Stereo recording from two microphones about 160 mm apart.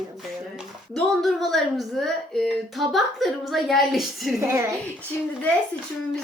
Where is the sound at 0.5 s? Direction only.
Centre (ahead or behind).